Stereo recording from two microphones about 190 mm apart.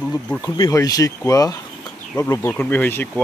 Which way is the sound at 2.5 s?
5° left (ahead or behind).